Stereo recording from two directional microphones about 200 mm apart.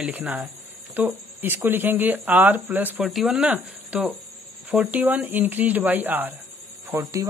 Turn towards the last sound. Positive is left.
turn(degrees=-10)  # may be behind; listen again after turning